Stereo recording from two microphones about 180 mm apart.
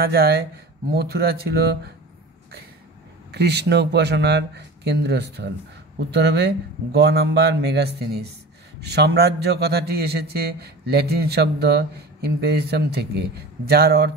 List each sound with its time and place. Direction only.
0.0 s a man's voice: 60° right (ahead or behind)
3.3 s a man's voice: 70° right (ahead or behind)